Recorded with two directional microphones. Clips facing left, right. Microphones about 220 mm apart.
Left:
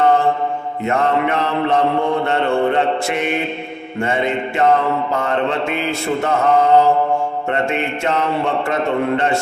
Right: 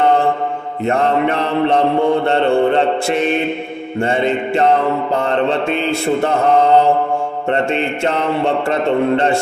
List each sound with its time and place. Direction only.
0.9 s mantra: 30° right (ahead or behind)
7.5 s mantra: 30° right (ahead or behind)